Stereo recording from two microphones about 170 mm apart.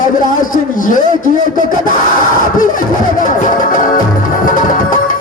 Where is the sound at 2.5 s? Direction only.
50° left (ahead or behind).